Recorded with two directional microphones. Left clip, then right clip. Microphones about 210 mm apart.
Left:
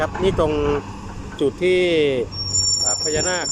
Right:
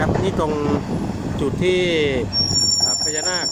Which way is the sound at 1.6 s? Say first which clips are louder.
Left 1 dB; 5° left (ahead or behind).